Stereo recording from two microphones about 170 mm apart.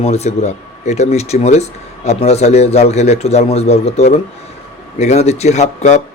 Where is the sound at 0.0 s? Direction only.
40° left (ahead or behind).